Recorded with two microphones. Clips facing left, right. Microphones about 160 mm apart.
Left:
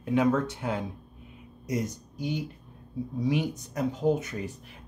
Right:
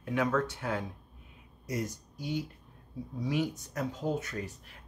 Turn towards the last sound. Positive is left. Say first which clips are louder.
# left 7 dB
turn(degrees=20)  # may be behind; listen again after turning